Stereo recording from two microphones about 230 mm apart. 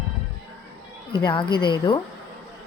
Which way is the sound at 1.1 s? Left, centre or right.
Centre.